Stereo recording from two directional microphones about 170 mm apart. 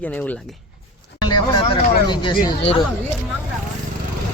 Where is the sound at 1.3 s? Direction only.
25° left (ahead or behind).